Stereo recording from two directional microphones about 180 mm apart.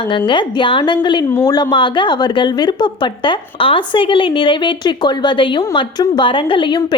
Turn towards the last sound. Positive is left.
turn(degrees=25)  # may be behind; listen again after turning